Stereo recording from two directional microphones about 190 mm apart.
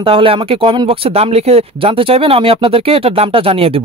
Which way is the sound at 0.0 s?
25° right (ahead or behind).